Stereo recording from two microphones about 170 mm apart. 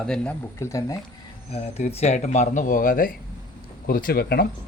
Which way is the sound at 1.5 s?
35° left (ahead or behind).